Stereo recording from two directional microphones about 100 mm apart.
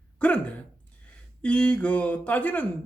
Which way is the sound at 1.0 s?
15° left (ahead or behind).